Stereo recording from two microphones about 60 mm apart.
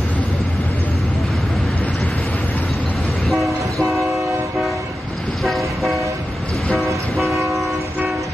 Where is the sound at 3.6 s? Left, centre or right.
Right.